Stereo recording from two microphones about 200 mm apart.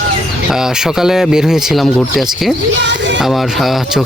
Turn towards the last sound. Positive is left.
turn(degrees=0)  # may be behind; listen again after turning